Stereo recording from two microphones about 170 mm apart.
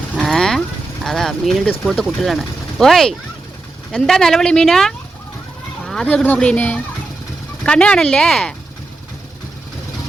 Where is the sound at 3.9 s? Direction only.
Centre (ahead or behind).